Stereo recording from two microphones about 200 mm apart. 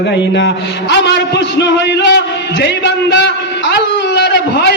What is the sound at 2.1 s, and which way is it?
A man's voice, 60° left (ahead or behind).